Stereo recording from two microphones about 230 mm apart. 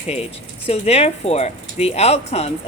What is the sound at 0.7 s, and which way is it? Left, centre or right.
Speech, left.